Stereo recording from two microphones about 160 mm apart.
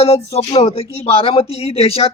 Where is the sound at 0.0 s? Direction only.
40° left (ahead or behind).